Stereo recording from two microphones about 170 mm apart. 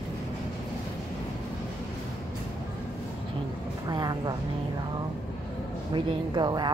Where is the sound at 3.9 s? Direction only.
25° right (ahead or behind).